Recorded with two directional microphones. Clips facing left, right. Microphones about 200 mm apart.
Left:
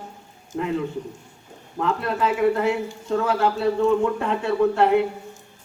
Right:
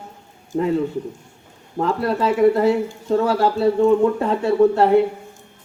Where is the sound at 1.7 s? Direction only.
35° right (ahead or behind).